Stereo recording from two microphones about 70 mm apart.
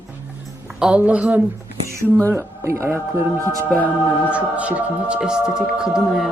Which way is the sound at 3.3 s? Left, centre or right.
Right.